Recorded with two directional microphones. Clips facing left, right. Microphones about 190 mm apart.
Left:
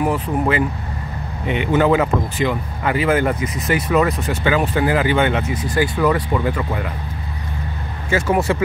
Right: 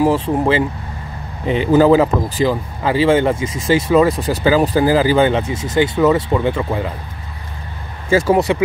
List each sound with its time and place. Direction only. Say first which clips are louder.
0.0 s speech: right 4 dB; 30° right (ahead or behind)
8.1 s speech: right 5 dB; 35° right (ahead or behind)